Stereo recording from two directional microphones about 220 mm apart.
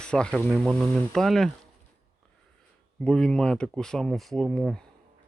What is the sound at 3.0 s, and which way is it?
Speech, 5° left (ahead or behind).